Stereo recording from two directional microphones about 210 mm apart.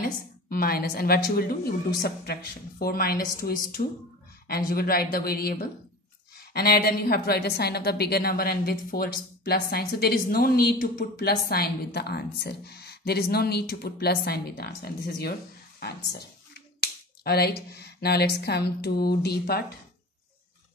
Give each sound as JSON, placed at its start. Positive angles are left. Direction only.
{"t": 0.0, "sound": "a woman's voice", "side_deg": 45}